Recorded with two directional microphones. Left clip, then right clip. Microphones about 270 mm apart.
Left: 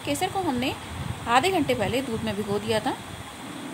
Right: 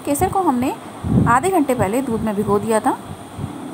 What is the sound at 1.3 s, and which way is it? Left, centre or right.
A woman's voice, centre.